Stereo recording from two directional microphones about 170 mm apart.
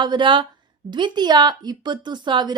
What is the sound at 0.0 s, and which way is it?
A woman's voice, 25° right (ahead or behind).